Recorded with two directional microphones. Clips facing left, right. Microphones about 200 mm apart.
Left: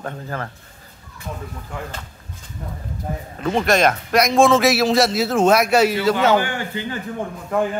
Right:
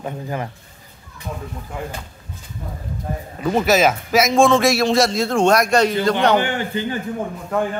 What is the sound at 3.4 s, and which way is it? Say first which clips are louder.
A man's voice: right 1 dB; 5° right (ahead or behind).